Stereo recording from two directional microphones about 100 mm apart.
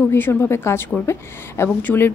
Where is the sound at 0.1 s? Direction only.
25° left (ahead or behind).